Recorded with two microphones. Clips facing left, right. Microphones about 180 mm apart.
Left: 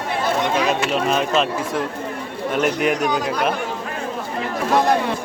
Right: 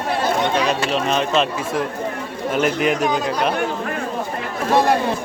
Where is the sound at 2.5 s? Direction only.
Centre (ahead or behind).